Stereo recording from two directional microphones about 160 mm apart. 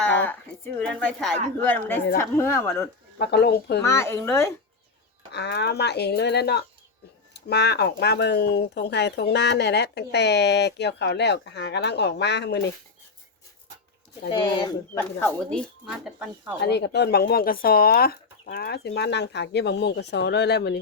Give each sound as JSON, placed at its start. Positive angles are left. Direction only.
{"t": 0.2, "sound": "speech", "side_deg": 10}
{"t": 3.2, "sound": "speech", "side_deg": 90}
{"t": 3.8, "sound": "speech", "side_deg": 15}
{"t": 5.3, "sound": "speech", "side_deg": 90}
{"t": 14.3, "sound": "speech", "side_deg": 30}
{"t": 15.2, "sound": "speech", "side_deg": 5}
{"t": 16.6, "sound": "speech", "side_deg": 90}